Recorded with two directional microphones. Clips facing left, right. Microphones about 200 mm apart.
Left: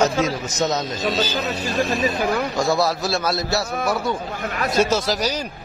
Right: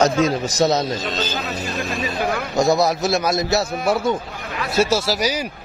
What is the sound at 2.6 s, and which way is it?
A man's voice, 20° right (ahead or behind).